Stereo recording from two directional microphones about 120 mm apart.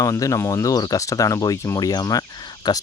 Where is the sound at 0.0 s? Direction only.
25° left (ahead or behind).